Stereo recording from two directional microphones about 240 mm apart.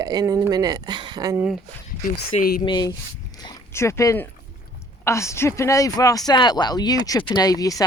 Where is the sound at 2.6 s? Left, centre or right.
Centre.